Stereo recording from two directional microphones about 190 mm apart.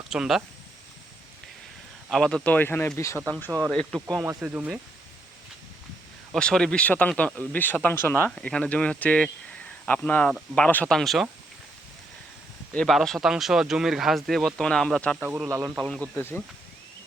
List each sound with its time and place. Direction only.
0.1 s speech: centre (ahead or behind)
2.0 s speech: 5° left (ahead or behind)
4.2 s speech: 10° right (ahead or behind)
6.3 s speech: 5° left (ahead or behind)
12.7 s speech: centre (ahead or behind)
15.2 s speech: 10° right (ahead or behind)
15.9 s speech: 5° left (ahead or behind)